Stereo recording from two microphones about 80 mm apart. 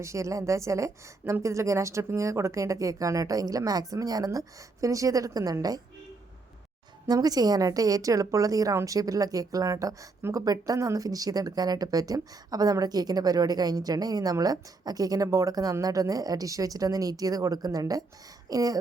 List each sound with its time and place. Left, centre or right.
0.0 s a woman's voice: right
7.1 s a woman's voice: right